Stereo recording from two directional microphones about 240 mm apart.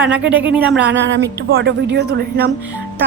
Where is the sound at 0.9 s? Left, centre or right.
Right.